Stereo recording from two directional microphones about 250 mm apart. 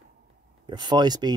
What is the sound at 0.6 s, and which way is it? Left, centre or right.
Speech, centre.